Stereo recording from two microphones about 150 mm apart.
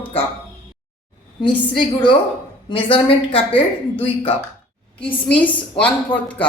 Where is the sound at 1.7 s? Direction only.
35° left (ahead or behind).